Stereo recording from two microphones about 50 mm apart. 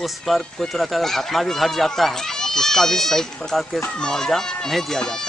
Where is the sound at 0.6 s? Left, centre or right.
Centre.